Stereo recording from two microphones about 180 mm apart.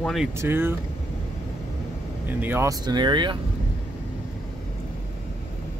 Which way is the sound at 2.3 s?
10° right (ahead or behind).